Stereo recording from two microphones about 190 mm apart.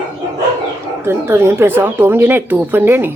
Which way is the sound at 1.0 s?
15° right (ahead or behind).